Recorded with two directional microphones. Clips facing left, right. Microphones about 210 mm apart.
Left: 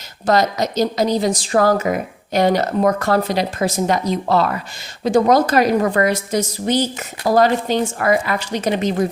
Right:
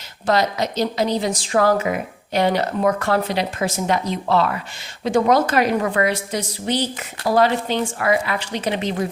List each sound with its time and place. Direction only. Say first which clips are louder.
0.3 s a woman's voice: left 3 dB; 40° left (ahead or behind)